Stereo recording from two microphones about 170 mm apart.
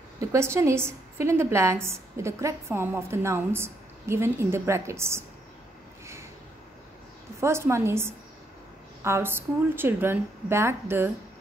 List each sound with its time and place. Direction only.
0.3 s a woman's voice: 15° right (ahead or behind)
7.3 s a woman's voice: 15° right (ahead or behind)